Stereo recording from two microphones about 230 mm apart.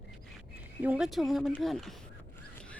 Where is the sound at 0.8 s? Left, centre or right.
Centre.